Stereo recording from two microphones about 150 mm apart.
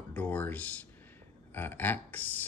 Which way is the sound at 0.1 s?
10° left (ahead or behind).